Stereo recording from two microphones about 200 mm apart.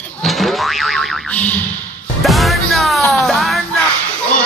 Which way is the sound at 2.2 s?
Centre (ahead or behind).